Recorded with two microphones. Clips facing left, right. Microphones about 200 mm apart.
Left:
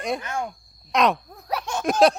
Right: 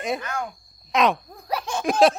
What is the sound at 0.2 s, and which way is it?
Speech, 25° left (ahead or behind).